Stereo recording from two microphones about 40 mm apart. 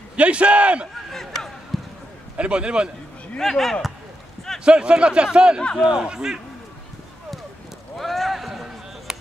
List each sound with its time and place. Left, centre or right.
0.1 s a man's voice: right
1.1 s a sound: centre
1.7 s run: centre
2.3 s speech: right
3.3 s speech: centre
4.6 s speech: right
8.0 s basketball bounce: centre
9.1 s a sound: centre